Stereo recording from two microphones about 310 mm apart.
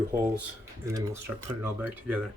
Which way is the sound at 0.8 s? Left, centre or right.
Centre.